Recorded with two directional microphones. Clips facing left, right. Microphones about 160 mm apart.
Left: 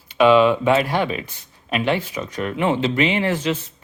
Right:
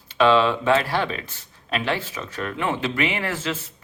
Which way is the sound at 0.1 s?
15° left (ahead or behind).